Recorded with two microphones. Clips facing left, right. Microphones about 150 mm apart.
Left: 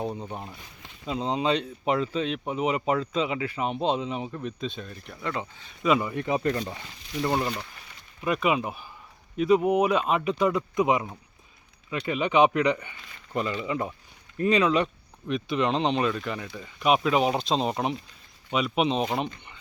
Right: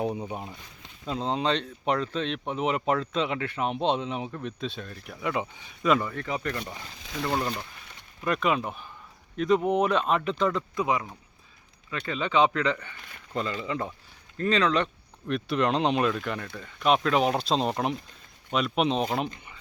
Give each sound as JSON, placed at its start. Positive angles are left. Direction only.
{"t": 0.0, "sound": "speech", "side_deg": -10}
{"t": 5.8, "sound": "speech", "side_deg": 5}
{"t": 6.1, "sound": "speech", "side_deg": 20}
{"t": 7.3, "sound": "speech", "side_deg": 10}